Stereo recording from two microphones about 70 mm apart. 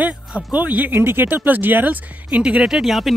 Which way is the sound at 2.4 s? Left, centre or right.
Centre.